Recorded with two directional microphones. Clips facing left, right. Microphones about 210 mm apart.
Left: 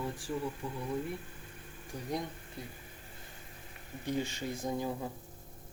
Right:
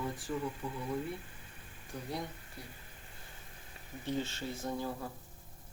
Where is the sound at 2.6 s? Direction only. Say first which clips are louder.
Left 5 dB; 20° left (ahead or behind).